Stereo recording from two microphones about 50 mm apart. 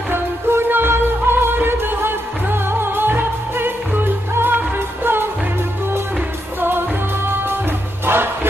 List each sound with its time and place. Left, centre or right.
0.1 s music: right
8.0 s music: right